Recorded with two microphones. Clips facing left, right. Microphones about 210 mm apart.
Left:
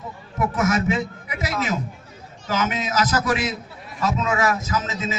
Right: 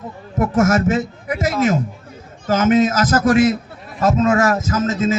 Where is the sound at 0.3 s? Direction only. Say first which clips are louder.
Right 6 dB; 50° right (ahead or behind).